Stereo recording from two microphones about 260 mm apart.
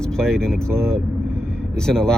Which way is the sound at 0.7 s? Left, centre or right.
Centre.